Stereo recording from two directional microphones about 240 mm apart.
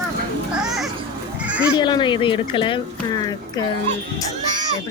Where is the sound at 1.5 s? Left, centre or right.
Centre.